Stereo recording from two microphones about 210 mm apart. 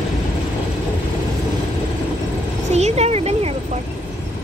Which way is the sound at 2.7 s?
30° right (ahead or behind).